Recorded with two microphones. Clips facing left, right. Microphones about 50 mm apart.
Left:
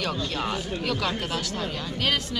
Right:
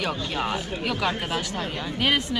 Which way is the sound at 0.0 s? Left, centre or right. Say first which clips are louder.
Right 1 dB; centre.